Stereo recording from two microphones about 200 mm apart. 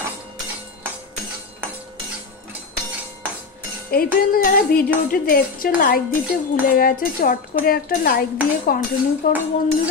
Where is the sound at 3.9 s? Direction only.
45° left (ahead or behind).